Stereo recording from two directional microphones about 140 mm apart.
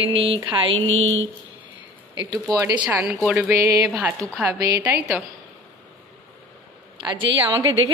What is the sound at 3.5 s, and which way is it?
Speech, 20° right (ahead or behind).